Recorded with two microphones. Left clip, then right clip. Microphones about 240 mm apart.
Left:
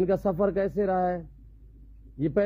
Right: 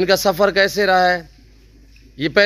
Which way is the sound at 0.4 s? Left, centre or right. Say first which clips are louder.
Right 11 dB; centre.